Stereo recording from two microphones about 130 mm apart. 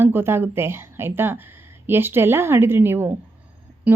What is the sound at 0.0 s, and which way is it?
A woman's voice, 15° right (ahead or behind).